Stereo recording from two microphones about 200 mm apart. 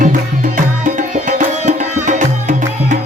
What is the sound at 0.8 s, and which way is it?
Music, 40° right (ahead or behind).